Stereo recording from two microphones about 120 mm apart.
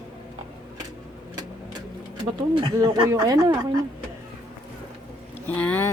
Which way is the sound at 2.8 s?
30° right (ahead or behind).